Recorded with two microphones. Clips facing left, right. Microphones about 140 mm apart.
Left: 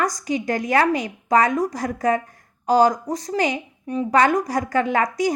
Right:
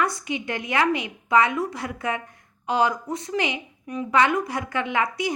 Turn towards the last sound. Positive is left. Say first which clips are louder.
# left 5 dB
turn(degrees=40)  # may be behind; listen again after turning